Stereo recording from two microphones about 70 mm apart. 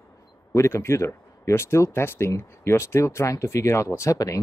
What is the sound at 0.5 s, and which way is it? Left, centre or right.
Speech, left.